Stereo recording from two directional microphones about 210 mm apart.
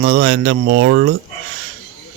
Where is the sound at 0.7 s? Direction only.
65° right (ahead or behind).